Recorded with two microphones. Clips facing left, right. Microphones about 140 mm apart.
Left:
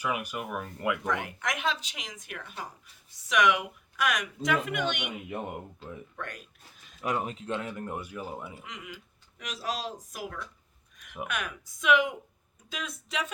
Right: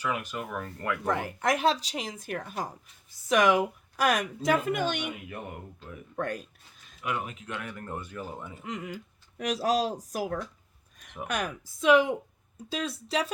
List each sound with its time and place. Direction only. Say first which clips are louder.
0.0 s speech: even; 10° left (ahead or behind)
1.0 s a woman's voice: right 4 dB; 35° right (ahead or behind)
6.1 s a woman's voice: right 14 dB; 40° right (ahead or behind)
7.0 s speech: left 2 dB; 35° left (ahead or behind); by 8.6 s 10° left (ahead or behind)
8.6 s a woman's voice: right 7 dB; 45° right (ahead or behind)